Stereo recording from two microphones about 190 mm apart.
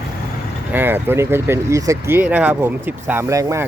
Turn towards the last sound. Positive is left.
turn(degrees=-15)  # may be behind; listen again after turning